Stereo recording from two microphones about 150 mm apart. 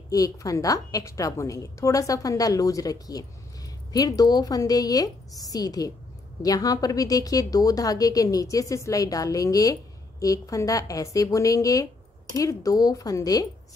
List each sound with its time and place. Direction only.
0.1 s a woman's voice: 20° left (ahead or behind)